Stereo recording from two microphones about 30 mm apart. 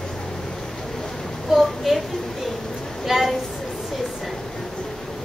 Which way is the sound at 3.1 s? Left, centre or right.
Centre.